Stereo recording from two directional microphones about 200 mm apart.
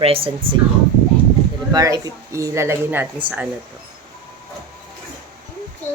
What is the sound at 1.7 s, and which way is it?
Speech, 15° right (ahead or behind).